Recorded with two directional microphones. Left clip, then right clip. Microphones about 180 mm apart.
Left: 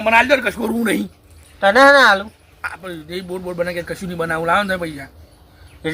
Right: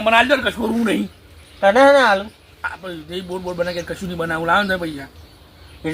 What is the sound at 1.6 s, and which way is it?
Speech, 10° left (ahead or behind).